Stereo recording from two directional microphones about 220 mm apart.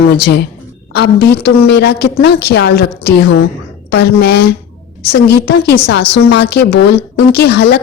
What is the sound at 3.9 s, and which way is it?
A woman's voice, 50° left (ahead or behind).